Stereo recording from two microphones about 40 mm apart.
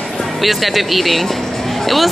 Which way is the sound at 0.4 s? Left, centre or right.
Centre.